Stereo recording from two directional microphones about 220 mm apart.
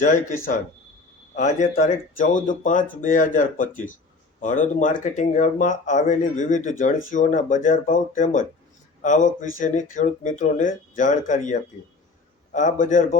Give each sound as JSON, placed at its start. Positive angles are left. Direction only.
{"t": 0.0, "sound": "speech", "side_deg": 35}
{"t": 1.4, "sound": "speech", "side_deg": 35}